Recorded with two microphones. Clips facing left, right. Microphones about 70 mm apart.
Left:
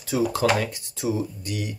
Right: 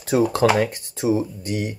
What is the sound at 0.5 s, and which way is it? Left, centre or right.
Speech, right.